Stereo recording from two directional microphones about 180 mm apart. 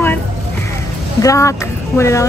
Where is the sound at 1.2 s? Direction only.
15° left (ahead or behind).